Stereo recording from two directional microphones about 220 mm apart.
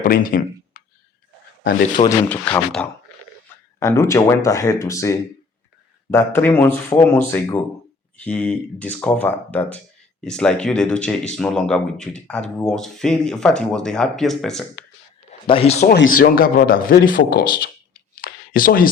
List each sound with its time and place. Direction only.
0.0 s a sound: 40° left (ahead or behind)
2.0 s speech: 25° left (ahead or behind)
2.3 s speech: 5° left (ahead or behind)
15.3 s a man's voice: 25° left (ahead or behind)
15.8 s speech: 45° left (ahead or behind)
18.1 s a sound: 40° left (ahead or behind)